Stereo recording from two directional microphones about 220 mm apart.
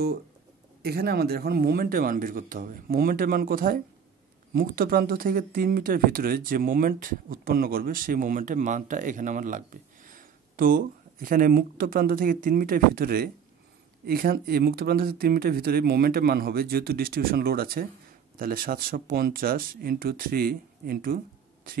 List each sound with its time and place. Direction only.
0.8 s speech: 45° right (ahead or behind)